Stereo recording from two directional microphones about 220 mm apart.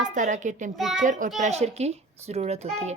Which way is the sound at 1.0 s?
35° right (ahead or behind).